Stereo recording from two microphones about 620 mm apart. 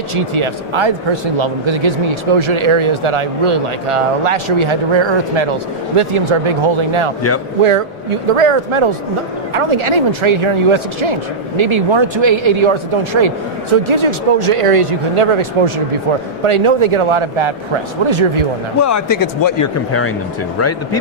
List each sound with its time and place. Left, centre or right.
0.1 s speech: right
18.8 s speech: left